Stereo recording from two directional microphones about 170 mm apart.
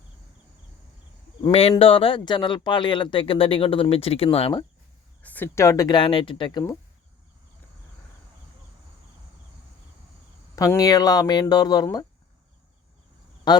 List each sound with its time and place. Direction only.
1.4 s speech: 35° left (ahead or behind)
5.2 s speech: 10° left (ahead or behind)
10.5 s speech: 20° left (ahead or behind)
13.5 s speech: 25° left (ahead or behind)